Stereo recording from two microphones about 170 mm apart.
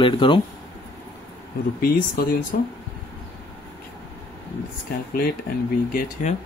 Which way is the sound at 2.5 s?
50° left (ahead or behind).